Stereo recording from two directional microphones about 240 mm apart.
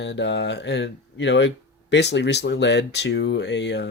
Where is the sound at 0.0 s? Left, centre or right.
Left.